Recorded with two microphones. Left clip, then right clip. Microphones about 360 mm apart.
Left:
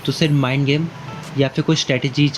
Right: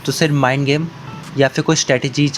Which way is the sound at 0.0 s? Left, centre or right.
Centre.